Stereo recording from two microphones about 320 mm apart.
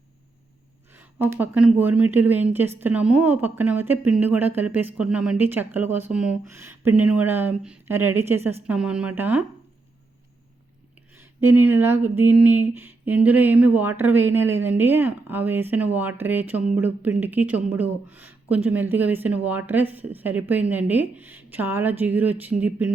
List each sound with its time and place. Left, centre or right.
0.9 s speech: centre
11.1 s speech: centre